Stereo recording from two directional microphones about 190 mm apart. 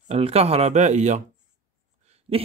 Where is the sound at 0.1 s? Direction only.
35° right (ahead or behind).